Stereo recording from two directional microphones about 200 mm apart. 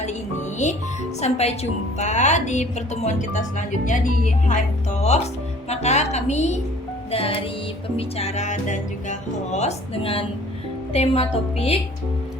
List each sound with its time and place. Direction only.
0.6 s speech: 35° left (ahead or behind)
5.6 s speech: 35° left (ahead or behind)